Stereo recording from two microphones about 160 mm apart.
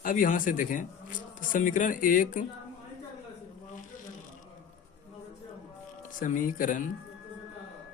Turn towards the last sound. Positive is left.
turn(degrees=55)  # may be behind; listen again after turning